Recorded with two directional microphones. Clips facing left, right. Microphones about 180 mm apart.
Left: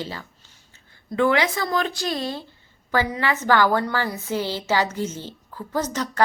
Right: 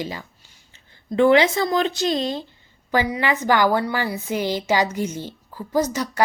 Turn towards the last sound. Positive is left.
turn(degrees=-10)  # may be behind; listen again after turning